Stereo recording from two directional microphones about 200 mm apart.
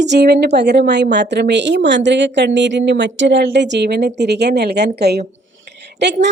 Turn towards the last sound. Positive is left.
turn(degrees=-60)  # may be behind; listen again after turning